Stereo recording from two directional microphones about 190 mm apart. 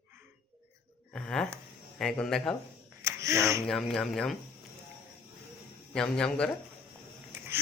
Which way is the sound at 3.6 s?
5° left (ahead or behind).